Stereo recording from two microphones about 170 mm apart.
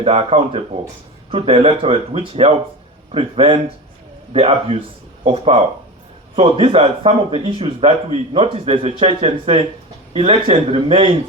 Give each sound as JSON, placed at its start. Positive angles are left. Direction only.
{"t": 0.0, "sound": "speech", "side_deg": -35}